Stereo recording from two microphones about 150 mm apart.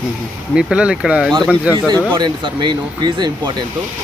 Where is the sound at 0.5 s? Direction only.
5° right (ahead or behind).